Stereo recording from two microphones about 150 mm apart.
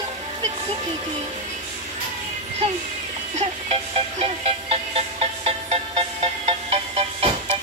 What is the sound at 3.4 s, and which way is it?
Music, 40° right (ahead or behind).